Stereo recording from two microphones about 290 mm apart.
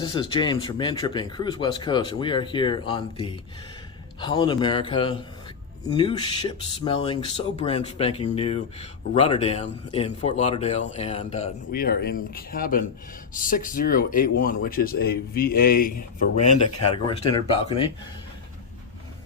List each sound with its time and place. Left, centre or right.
0.0 s speech: centre
11.7 s speech: left
15.9 s a man's voice: left
16.9 s speech: centre